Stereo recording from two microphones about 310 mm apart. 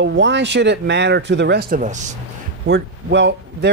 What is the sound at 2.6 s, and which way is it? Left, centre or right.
Speech, right.